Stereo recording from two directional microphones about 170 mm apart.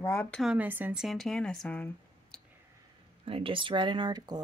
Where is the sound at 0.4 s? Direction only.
5° right (ahead or behind).